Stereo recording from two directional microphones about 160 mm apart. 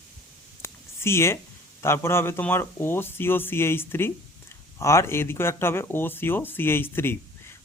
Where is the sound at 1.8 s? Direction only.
15° left (ahead or behind).